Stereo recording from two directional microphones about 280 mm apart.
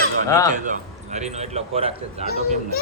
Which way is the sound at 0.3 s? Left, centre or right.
Centre.